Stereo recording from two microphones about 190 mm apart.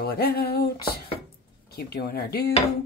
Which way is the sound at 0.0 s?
55° left (ahead or behind).